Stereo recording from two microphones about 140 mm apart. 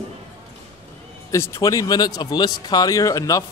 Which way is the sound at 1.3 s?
20° left (ahead or behind).